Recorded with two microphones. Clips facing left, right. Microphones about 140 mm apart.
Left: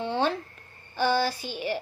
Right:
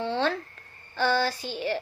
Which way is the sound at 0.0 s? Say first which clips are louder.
Even; 15° left (ahead or behind).